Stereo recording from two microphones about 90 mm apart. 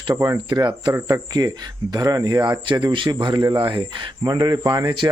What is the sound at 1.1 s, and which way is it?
Speech, 45° right (ahead or behind).